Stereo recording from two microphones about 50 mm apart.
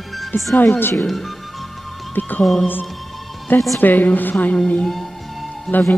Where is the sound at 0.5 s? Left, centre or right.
Left.